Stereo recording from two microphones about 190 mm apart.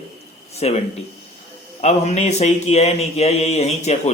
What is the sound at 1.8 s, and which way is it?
A man's voice, 35° left (ahead or behind).